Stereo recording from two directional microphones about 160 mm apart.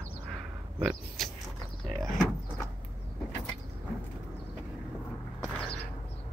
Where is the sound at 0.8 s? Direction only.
5° right (ahead or behind).